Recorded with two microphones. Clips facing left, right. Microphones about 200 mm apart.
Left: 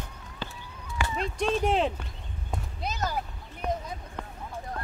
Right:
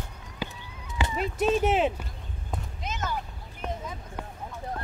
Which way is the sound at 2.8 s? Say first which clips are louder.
Left 2 dB; 35° left (ahead or behind).